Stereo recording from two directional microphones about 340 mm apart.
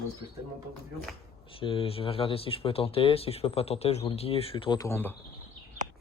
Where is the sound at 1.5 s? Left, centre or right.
Centre.